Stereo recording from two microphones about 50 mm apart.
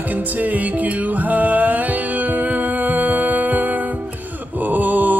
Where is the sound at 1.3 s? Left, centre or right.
Right.